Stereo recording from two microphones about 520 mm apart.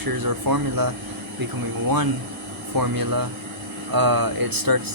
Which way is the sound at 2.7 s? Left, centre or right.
Right.